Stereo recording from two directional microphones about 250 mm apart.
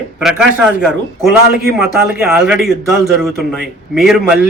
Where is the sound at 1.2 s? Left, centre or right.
Right.